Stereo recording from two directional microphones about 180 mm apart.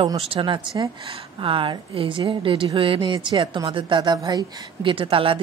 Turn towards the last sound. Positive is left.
turn(degrees=-30)  # may be behind; listen again after turning